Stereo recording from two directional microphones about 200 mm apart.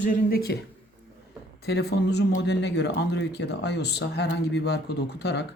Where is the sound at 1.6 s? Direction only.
55° left (ahead or behind).